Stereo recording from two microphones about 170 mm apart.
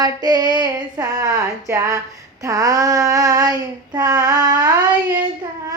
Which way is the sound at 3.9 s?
20° right (ahead or behind).